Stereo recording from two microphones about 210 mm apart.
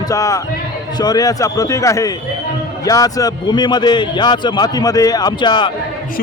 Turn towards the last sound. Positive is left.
turn(degrees=20)  # may be behind; listen again after turning